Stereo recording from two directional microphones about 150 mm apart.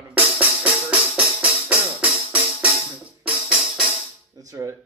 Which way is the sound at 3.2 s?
5° right (ahead or behind).